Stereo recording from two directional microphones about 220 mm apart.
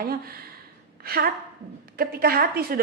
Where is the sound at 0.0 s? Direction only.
45° right (ahead or behind).